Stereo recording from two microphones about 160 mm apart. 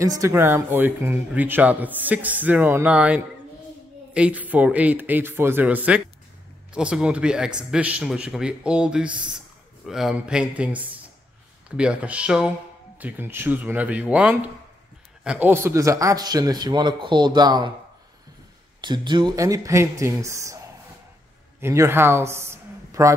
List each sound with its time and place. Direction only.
0.0 s a man's voice: 20° right (ahead or behind)
18.8 s a man's voice: 30° right (ahead or behind)
21.5 s a man's voice: 15° right (ahead or behind)